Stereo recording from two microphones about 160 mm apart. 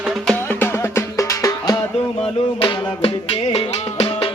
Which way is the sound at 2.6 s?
35° left (ahead or behind).